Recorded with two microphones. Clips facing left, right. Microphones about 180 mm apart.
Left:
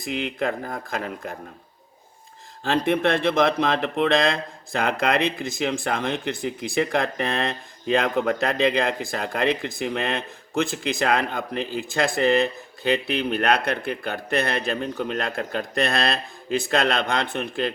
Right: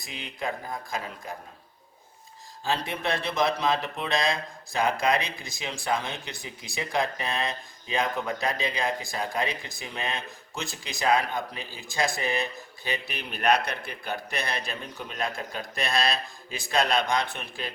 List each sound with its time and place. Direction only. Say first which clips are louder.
0.0 s speech: left 8 dB; 60° left (ahead or behind)
2.6 s speech: left 8 dB; 55° left (ahead or behind)